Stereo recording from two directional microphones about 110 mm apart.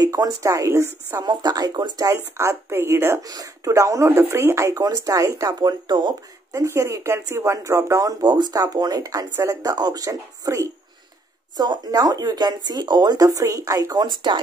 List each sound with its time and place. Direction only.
0.0 s speech: 35° right (ahead or behind)
1.2 s speech: 40° right (ahead or behind)
2.1 s speech: 25° right (ahead or behind); by 6.1 s 40° right (ahead or behind)
6.5 s speech: 25° right (ahead or behind); by 14.4 s 45° right (ahead or behind)